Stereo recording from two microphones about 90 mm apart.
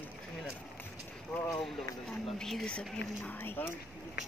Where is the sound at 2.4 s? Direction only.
5° left (ahead or behind); by 3.7 s 25° left (ahead or behind).